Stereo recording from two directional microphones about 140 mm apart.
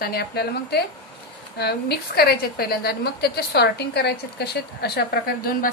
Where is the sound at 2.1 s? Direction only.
90° left.